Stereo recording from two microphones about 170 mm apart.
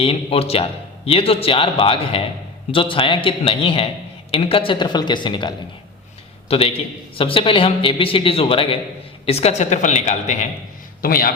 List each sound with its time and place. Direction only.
0.0 s a man's voice: 35° left (ahead or behind)
11.0 s a man's voice: 60° left (ahead or behind)